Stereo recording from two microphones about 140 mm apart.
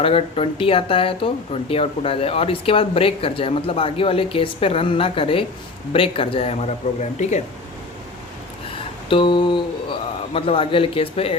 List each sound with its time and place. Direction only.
0.0 s speech: 40° left (ahead or behind)
9.0 s speech: 35° left (ahead or behind)